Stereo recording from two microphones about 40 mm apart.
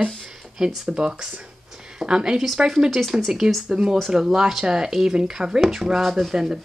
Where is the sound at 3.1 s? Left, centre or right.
Centre.